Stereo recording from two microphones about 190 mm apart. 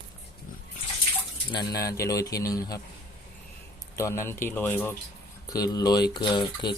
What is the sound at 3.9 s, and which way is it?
Speech, 15° left (ahead or behind).